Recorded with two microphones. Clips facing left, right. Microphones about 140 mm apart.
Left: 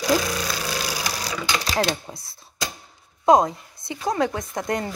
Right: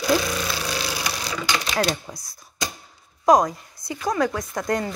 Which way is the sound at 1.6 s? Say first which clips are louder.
Left 1 dB; 30° left (ahead or behind).